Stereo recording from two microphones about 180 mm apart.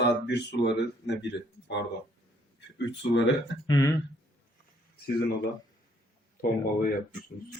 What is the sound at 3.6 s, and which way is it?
Speech, 20° left (ahead or behind).